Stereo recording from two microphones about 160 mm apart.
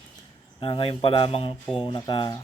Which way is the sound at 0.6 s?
35° left (ahead or behind).